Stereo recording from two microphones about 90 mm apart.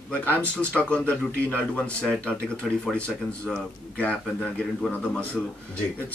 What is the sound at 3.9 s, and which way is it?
Speech, 15° left (ahead or behind).